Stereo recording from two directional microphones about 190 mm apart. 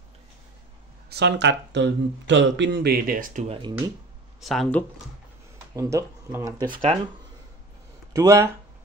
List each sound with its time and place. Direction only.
1.1 s speech: 65° right (ahead or behind); by 3.5 s 45° right (ahead or behind)
4.4 s speech: centre (ahead or behind)
5.8 s speech: 15° right (ahead or behind)
8.1 s speech: 15° right (ahead or behind)